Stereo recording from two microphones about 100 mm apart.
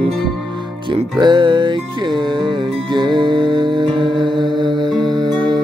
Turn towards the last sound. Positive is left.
turn(degrees=-45)  # may be behind; listen again after turning